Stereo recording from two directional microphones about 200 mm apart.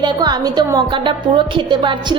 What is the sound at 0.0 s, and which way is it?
A woman's voice, 20° right (ahead or behind).